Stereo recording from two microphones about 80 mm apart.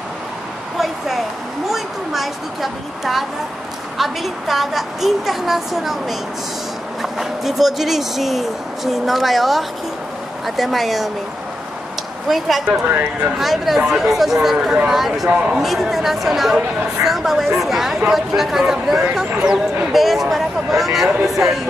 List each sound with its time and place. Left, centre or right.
0.7 s a sound: centre
1.7 s a woman's voice: centre
12.3 s a woman's voice: centre
12.6 s speech: right
13.4 s a woman's voice: centre
15.2 s speech: centre
15.6 s a woman's voice: centre